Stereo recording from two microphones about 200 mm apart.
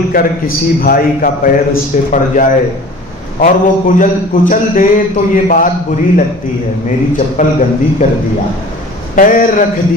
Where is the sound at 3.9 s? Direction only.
40° left (ahead or behind).